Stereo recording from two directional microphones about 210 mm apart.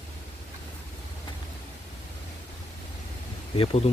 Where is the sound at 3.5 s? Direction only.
25° left (ahead or behind).